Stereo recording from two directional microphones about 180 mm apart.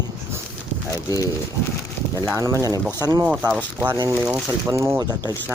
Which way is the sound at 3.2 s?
10° right (ahead or behind).